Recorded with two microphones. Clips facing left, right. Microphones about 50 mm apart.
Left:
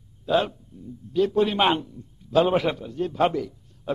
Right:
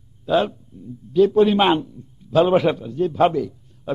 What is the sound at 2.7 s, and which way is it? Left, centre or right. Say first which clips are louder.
Speech: right 5 dB; centre.